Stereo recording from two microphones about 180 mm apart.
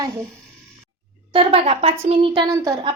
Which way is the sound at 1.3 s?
30° right (ahead or behind).